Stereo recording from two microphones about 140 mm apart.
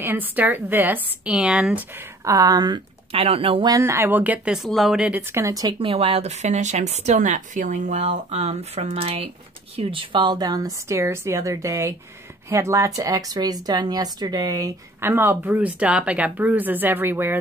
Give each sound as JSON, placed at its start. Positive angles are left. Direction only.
{"t": 0.0, "sound": "a woman's voice", "side_deg": -15}
{"t": 2.2, "sound": "speech", "side_deg": -25}
{"t": 3.1, "sound": "speech", "side_deg": -45}
{"t": 3.6, "sound": "speech", "side_deg": -20}